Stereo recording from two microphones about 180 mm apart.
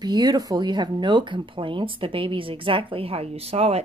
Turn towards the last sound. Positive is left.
turn(degrees=-35)  # may be behind; listen again after turning